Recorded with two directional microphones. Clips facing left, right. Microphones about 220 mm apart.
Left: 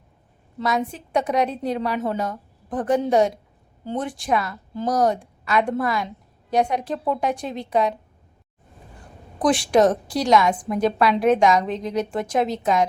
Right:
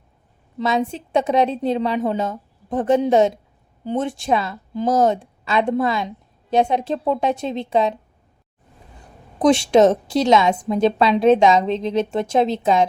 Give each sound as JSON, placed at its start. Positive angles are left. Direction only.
{"t": 0.6, "sound": "a woman's voice", "side_deg": -25}
{"t": 9.4, "sound": "a woman's voice", "side_deg": -25}